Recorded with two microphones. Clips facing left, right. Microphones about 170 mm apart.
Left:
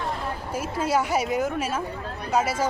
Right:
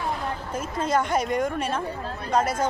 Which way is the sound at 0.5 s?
10° left (ahead or behind).